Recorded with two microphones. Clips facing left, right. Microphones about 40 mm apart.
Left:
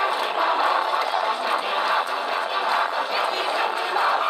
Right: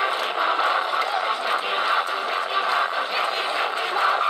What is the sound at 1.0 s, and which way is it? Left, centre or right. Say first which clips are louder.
Vehicle: left 1 dB; right.